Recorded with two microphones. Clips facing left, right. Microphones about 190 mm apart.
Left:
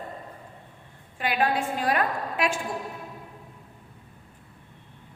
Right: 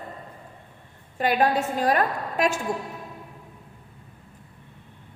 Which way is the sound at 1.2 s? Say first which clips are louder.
Right 4 dB; 40° right (ahead or behind).